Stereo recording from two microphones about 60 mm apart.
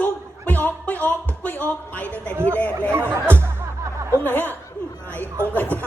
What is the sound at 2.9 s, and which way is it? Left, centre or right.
Speech, right.